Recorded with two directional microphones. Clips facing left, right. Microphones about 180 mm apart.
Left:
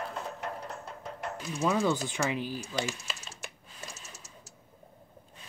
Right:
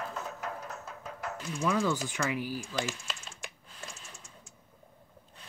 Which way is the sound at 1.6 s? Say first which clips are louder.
Left 2 dB; 20° left (ahead or behind).